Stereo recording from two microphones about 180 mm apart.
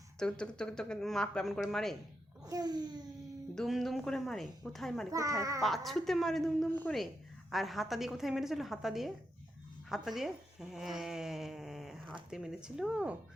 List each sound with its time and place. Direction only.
0.2 s speech: 5° left (ahead or behind)
2.4 s a child's voice: 20° right (ahead or behind)
3.5 s speech: centre (ahead or behind)
5.1 s a child's voice: 15° right (ahead or behind)
5.6 s speech: centre (ahead or behind)